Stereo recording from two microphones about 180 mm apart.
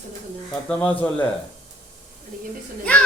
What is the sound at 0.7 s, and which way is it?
Speech, 10° left (ahead or behind).